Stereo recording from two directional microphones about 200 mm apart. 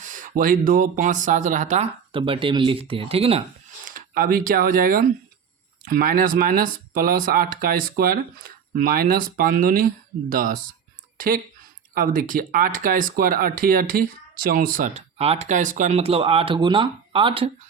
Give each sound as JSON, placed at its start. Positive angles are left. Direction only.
{"t": 0.0, "sound": "speech", "side_deg": -40}
{"t": 3.8, "sound": "speech", "side_deg": -45}
{"t": 11.9, "sound": "speech", "side_deg": -45}